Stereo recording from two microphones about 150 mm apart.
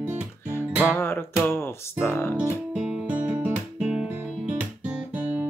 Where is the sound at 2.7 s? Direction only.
5° right (ahead or behind).